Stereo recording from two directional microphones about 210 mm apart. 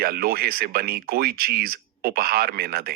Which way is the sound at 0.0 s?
45° right (ahead or behind).